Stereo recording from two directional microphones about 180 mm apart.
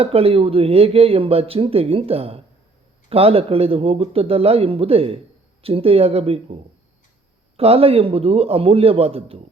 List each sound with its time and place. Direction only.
0.0 s speech: 30° right (ahead or behind)